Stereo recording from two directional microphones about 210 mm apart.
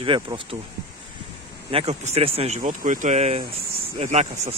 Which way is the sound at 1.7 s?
30° right (ahead or behind).